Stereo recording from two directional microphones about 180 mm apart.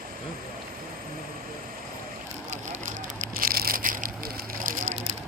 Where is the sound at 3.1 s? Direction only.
55° right (ahead or behind).